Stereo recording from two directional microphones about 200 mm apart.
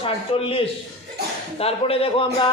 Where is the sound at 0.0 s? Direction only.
25° left (ahead or behind).